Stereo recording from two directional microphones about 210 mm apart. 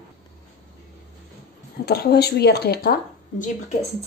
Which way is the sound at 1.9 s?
50° left (ahead or behind).